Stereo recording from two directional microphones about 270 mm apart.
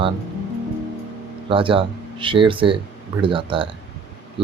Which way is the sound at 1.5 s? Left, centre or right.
Centre.